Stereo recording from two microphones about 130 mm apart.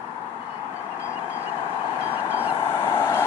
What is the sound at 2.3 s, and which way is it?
Vehicle, 15° left (ahead or behind).